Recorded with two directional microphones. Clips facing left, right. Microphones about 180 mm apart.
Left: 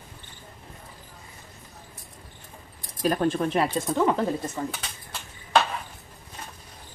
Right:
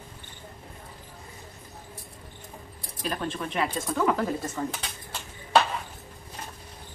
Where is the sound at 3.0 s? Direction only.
45° left (ahead or behind); by 4.3 s 25° left (ahead or behind).